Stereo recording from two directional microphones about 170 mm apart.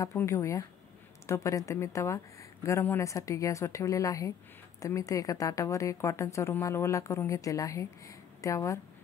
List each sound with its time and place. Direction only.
0.0 s a woman's voice: 15° left (ahead or behind)